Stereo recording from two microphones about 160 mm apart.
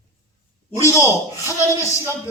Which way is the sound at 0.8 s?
20° left (ahead or behind).